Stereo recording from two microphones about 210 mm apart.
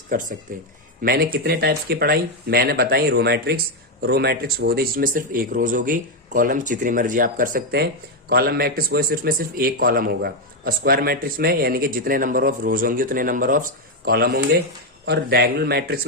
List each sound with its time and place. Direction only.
0.1 s a man's voice: 40° right (ahead or behind)